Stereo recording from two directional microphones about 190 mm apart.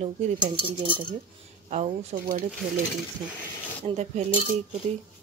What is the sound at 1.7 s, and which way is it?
Speech, 35° right (ahead or behind).